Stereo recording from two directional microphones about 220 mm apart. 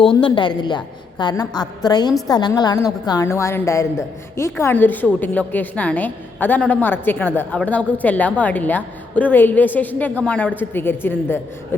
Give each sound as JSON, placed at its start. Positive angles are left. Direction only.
{"t": 0.2, "sound": "a woman's voice", "side_deg": 20}